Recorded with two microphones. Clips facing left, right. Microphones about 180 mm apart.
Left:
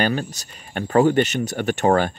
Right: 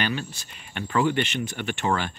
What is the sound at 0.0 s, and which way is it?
Speech, 40° left (ahead or behind).